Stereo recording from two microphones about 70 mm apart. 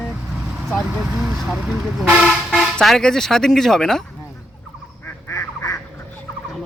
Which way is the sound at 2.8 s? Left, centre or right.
Centre.